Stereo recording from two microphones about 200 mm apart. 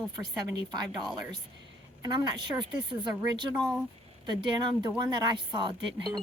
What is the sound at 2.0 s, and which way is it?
Speech, 20° right (ahead or behind).